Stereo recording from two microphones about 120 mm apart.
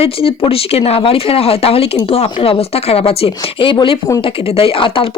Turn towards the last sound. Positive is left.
turn(degrees=50)  # may be behind; listen again after turning